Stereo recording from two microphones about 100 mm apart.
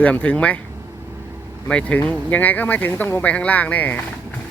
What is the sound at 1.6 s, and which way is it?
Speech, 15° left (ahead or behind).